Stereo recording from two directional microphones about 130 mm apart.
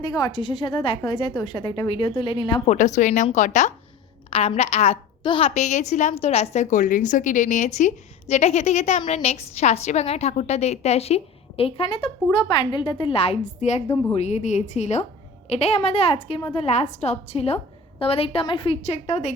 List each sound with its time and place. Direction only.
0.0 s a woman's voice: 30° left (ahead or behind)
2.6 s speech: 65° left (ahead or behind)
4.3 s a woman's voice: 50° left (ahead or behind)
13.8 s a woman's voice: 25° left (ahead or behind)
14.1 s a woman's voice: 55° left (ahead or behind)